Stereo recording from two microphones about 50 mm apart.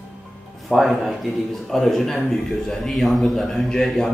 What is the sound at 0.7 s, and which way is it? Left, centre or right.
Speech, centre.